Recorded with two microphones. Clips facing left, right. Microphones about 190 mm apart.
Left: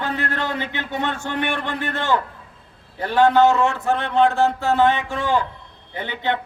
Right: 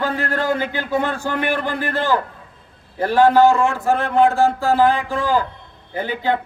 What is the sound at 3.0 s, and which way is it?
A man's voice, 40° right (ahead or behind).